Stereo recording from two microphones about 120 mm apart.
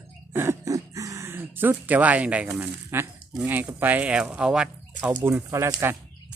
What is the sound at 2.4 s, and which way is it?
Speech, 20° right (ahead or behind).